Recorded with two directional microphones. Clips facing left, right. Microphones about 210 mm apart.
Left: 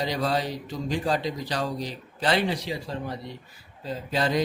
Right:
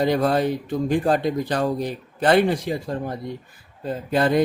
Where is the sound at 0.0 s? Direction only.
55° right (ahead or behind).